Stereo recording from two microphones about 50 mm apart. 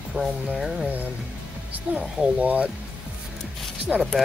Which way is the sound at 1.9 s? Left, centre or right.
Right.